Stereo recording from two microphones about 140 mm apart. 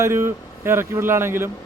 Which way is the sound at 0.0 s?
20° right (ahead or behind).